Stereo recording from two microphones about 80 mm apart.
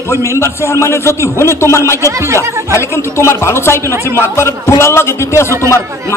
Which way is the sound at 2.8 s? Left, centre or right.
Left.